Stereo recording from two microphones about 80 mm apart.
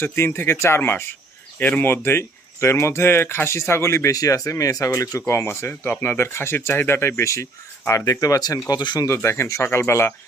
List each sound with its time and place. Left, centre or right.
0.0 s speech: left
5.3 s speech: left
8.7 s speech: left
9.0 s speech: left